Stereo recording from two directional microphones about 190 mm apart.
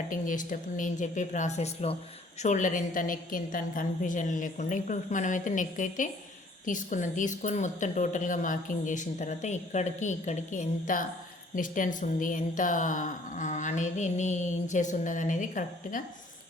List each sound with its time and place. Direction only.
0.1 s a woman's voice: 45° left (ahead or behind)